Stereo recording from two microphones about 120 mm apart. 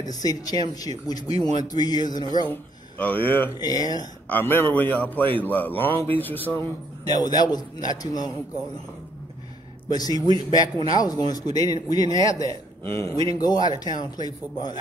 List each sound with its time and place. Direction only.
0.0 s speech: 35° left (ahead or behind)
2.5 s a man's voice: 15° left (ahead or behind)
3.5 s speech: 30° left (ahead or behind)
4.3 s a man's voice: 15° left (ahead or behind)
7.1 s speech: 35° left (ahead or behind)
9.9 s a man's voice: 30° left (ahead or behind)